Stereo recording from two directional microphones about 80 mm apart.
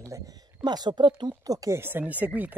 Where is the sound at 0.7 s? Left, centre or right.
Right.